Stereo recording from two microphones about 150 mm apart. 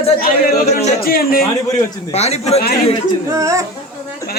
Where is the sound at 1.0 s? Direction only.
80° left.